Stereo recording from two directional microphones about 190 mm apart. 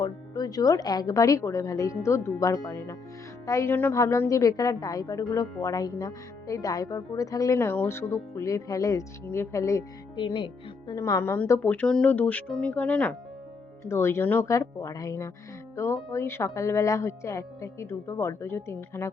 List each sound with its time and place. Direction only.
0.0 s a woman's voice: 20° left (ahead or behind)